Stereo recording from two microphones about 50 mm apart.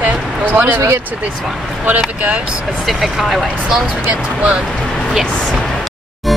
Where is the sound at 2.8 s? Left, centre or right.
Centre.